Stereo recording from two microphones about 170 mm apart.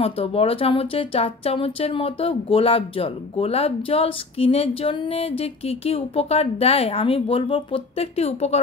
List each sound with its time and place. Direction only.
0.0 s speech: 35° left (ahead or behind)